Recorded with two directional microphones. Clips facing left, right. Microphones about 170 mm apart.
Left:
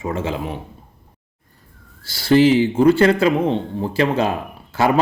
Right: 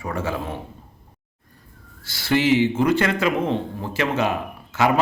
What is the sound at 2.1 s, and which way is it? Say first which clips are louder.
Speech: left 5 dB; 30° left (ahead or behind).